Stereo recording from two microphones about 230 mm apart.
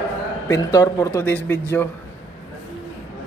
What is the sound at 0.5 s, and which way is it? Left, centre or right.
A man's voice, centre.